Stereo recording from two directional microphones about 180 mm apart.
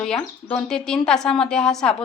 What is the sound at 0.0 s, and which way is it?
A woman's voice, 5° left (ahead or behind).